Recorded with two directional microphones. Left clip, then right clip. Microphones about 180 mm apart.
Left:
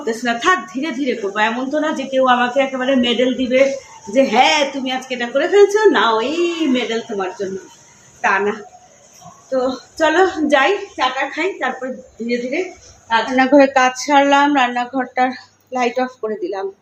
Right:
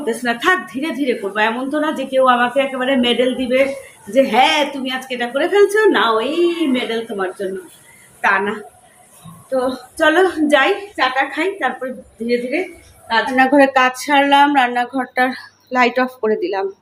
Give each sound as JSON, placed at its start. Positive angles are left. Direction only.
{"t": 0.0, "sound": "a woman's voice", "side_deg": -5}
{"t": 9.5, "sound": "speech", "side_deg": 0}
{"t": 15.7, "sound": "speech", "side_deg": -25}